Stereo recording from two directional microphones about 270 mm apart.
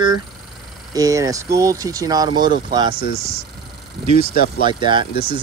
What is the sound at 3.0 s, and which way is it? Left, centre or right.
Speech, left.